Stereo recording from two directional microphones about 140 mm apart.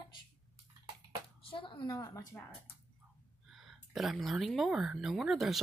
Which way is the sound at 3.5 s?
Centre (ahead or behind).